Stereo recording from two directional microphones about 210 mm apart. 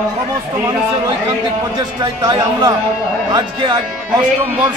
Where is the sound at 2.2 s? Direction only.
20° right (ahead or behind).